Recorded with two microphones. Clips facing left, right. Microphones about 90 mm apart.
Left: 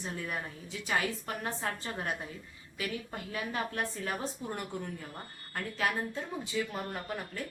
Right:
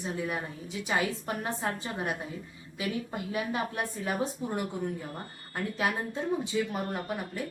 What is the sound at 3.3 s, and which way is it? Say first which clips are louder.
A woman's voice: right 3 dB; 15° right (ahead or behind).